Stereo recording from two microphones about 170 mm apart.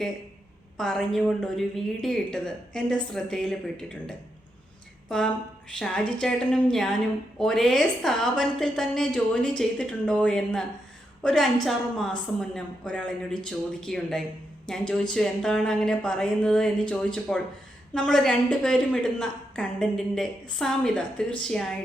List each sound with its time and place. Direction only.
0.8 s a woman's voice: centre (ahead or behind)